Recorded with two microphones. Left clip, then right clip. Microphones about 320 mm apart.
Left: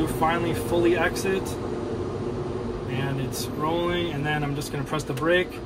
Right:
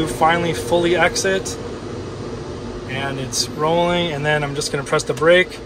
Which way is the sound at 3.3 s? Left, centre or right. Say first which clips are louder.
Right 10 dB; centre.